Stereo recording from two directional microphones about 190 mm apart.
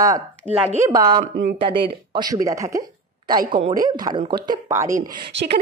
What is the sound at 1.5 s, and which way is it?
A woman's voice, 30° right (ahead or behind).